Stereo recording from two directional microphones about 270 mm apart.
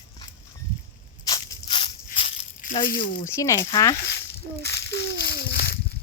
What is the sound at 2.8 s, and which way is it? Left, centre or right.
Speech, left.